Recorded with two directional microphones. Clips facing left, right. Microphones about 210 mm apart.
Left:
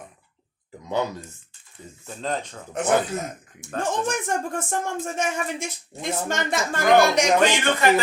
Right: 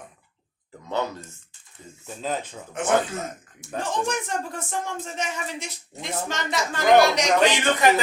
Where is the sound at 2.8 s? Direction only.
35° left (ahead or behind).